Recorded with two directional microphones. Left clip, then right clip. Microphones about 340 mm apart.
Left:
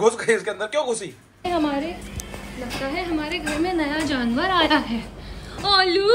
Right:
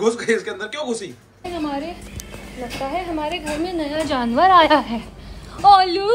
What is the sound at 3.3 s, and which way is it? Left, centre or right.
Speech, centre.